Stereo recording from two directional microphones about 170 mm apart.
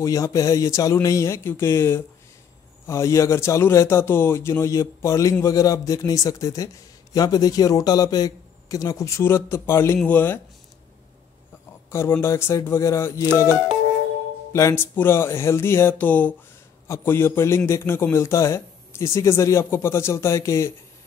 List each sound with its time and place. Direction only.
0.0 s a man's voice: 20° left (ahead or behind)
11.9 s a man's voice: 15° left (ahead or behind)
14.5 s a man's voice: 15° left (ahead or behind)